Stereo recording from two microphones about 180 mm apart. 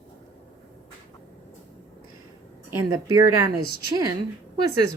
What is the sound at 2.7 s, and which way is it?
Speech, 20° right (ahead or behind).